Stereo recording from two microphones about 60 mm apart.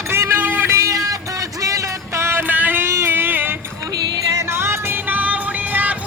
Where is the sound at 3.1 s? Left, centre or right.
Right.